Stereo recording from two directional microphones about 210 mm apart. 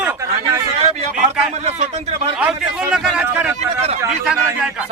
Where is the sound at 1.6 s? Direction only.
30° right (ahead or behind).